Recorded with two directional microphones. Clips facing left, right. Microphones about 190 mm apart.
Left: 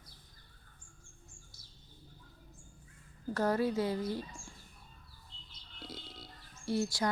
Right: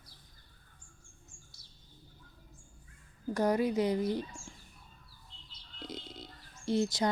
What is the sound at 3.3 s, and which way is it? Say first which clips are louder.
Speech: right 2 dB; 15° right (ahead or behind).